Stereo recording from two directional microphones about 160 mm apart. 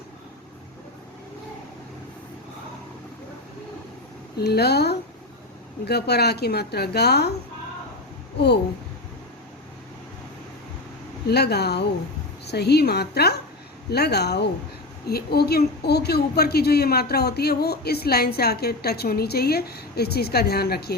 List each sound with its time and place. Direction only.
4.4 s a woman's voice: 90° left
11.3 s a woman's voice: 90° left
15.0 s a woman's voice: 80° left